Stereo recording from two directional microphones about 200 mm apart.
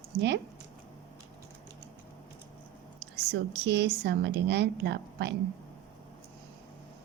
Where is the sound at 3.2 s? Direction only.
55° right (ahead or behind).